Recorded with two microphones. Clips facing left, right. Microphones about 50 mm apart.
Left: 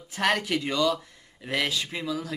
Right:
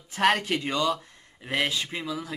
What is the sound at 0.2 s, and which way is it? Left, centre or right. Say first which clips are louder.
A man's voice: right 2 dB; centre.